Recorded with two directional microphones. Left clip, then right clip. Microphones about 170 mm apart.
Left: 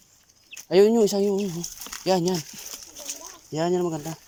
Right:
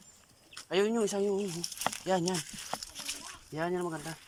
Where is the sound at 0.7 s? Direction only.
35° left (ahead or behind).